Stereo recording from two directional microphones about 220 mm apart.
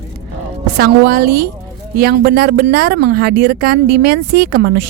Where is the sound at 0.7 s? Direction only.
45° right (ahead or behind).